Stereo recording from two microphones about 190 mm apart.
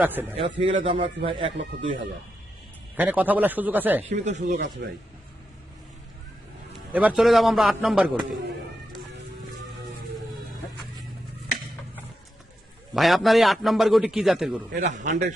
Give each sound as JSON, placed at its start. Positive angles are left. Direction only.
{"t": 0.0, "sound": "speech", "side_deg": -10}
{"t": 0.6, "sound": "speech", "side_deg": -25}
{"t": 2.9, "sound": "speech", "side_deg": -10}
{"t": 4.2, "sound": "a man's voice", "side_deg": -40}
{"t": 4.5, "sound": "a man's voice", "side_deg": -60}
{"t": 6.9, "sound": "a man's voice", "side_deg": -5}
{"t": 12.9, "sound": "a man's voice", "side_deg": 0}
{"t": 14.8, "sound": "a man's voice", "side_deg": -40}